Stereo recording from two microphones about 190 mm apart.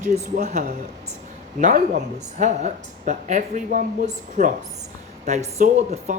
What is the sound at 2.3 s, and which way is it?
Speech, 40° right (ahead or behind).